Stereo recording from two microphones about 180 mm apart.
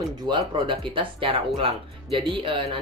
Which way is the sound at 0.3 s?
30° right (ahead or behind).